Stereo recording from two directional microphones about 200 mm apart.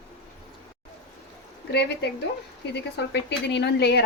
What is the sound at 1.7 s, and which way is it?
Speech, 55° left (ahead or behind).